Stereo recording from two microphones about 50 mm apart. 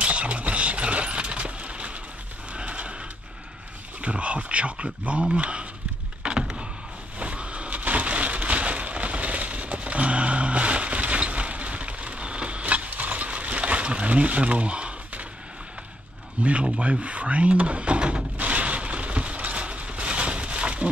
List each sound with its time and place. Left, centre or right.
0.0 s a sound: right
4.0 s speech: right
6.2 s power windows: centre
7.2 s a sound: right
16.4 s speech: right
16.7 s wood: right